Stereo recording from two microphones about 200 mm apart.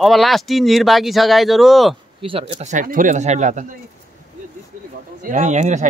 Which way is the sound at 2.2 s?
25° right (ahead or behind).